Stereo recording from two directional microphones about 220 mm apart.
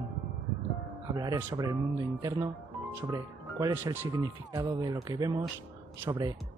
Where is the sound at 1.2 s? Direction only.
15° right (ahead or behind).